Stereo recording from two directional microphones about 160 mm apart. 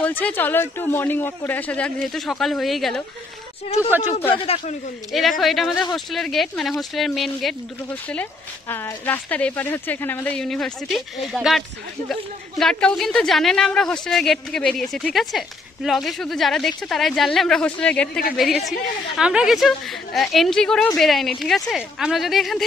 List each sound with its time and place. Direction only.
0.0 s speech: 10° left (ahead or behind)
3.6 s a man's voice: 40° left (ahead or behind)
4.1 s speech: 15° left (ahead or behind)
4.4 s a man's voice: 40° left (ahead or behind)
5.4 s speech: centre (ahead or behind)
7.9 s speech: 10° left (ahead or behind)
18.7 s speech: 5° right (ahead or behind)